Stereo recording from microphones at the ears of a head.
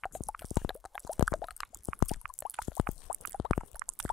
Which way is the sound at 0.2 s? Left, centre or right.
Left.